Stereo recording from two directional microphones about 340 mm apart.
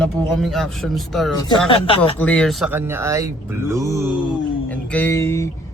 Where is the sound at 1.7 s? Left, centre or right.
Centre.